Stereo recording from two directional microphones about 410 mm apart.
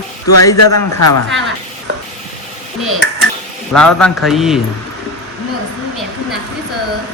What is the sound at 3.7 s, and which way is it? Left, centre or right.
Speech, centre.